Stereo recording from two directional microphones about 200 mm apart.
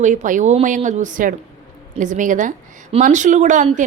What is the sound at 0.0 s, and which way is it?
A woman's voice, 40° right (ahead or behind).